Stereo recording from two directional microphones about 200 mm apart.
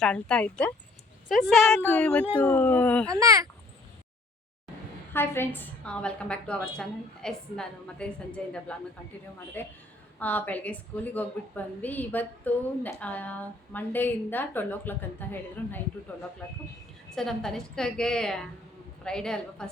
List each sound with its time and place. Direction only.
0.0 s a woman's voice: 5° left (ahead or behind)
3.1 s speech: 15° right (ahead or behind)
5.1 s a woman's voice: 10° left (ahead or behind)
17.2 s a woman's voice: 5° left (ahead or behind)